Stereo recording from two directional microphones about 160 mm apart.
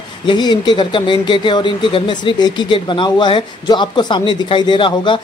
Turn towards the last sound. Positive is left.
turn(degrees=30)  # may be behind; listen again after turning